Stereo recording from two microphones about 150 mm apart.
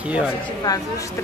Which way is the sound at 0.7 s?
25° left (ahead or behind).